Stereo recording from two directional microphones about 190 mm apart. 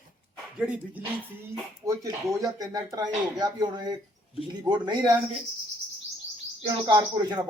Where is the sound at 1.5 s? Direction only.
20° right (ahead or behind).